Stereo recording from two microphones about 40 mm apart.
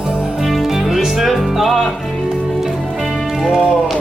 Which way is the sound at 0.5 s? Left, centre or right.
Centre.